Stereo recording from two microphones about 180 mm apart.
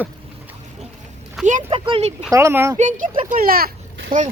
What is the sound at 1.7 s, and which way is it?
Speech, 30° right (ahead or behind).